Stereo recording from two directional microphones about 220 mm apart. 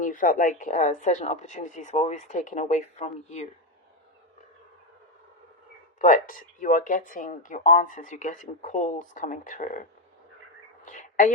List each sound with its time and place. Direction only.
0.0 s speech: 35° left (ahead or behind)
6.0 s speech: 35° left (ahead or behind)
10.8 s bird: 35° left (ahead or behind)